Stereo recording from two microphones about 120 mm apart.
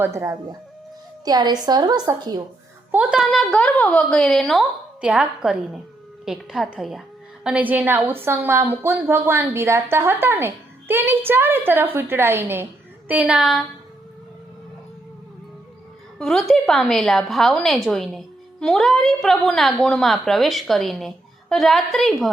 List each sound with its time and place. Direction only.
0.0 s a woman's voice: 25° right (ahead or behind)
1.2 s a woman's voice: 35° right (ahead or behind)
2.9 s a woman's voice: 10° right (ahead or behind)
4.9 s a woman's voice: 10° right (ahead or behind)
16.1 s a woman's voice: 5° left (ahead or behind)